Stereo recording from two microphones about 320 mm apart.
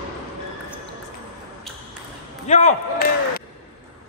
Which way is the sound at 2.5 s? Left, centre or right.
Left.